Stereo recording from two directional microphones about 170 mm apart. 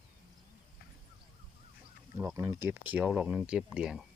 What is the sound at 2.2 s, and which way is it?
Speech, 15° right (ahead or behind).